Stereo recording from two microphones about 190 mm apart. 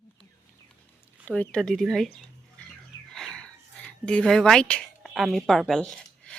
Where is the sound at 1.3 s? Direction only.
5° left (ahead or behind).